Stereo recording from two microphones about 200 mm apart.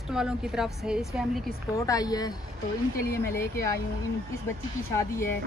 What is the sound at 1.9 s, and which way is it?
Speech, 20° left (ahead or behind).